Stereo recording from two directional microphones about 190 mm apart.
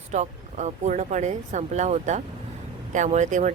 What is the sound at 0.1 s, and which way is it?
Speech, 40° right (ahead or behind).